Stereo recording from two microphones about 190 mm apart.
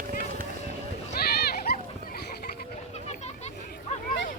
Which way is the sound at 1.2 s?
55° left (ahead or behind).